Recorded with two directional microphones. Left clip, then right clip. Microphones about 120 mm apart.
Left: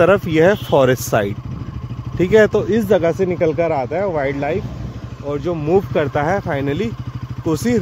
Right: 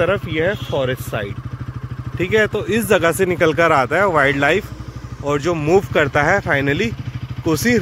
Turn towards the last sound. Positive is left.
turn(degrees=10)  # may be behind; listen again after turning